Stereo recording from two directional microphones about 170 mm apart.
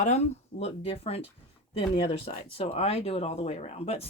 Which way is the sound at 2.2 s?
35° left (ahead or behind).